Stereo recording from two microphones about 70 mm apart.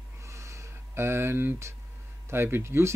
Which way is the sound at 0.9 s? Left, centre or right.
Right.